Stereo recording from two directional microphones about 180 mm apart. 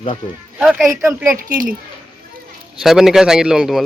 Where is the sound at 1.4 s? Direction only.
50° right (ahead or behind).